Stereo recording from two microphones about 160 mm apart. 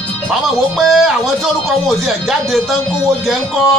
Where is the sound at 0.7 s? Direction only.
Centre (ahead or behind).